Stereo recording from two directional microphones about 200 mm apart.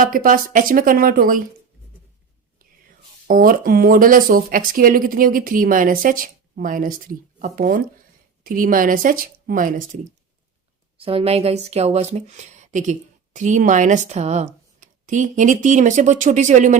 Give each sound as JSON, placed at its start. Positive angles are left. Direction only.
{"t": 0.0, "sound": "speech", "side_deg": -45}
{"t": 3.2, "sound": "speech", "side_deg": -45}
{"t": 10.9, "sound": "speech", "side_deg": -30}